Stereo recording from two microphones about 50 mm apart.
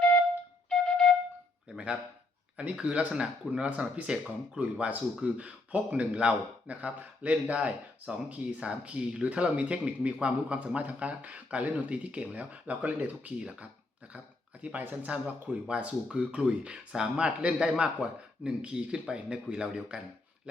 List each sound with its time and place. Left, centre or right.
0.7 s flute: centre
1.7 s speech: right
4.8 s speech: right